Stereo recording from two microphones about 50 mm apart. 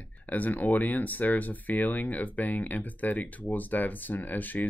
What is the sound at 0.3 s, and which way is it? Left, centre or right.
Speech, left.